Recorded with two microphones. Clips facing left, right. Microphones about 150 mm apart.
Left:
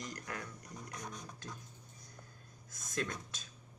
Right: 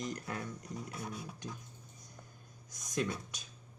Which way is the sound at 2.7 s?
15° right (ahead or behind).